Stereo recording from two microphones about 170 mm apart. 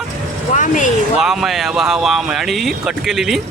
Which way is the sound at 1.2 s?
Centre (ahead or behind).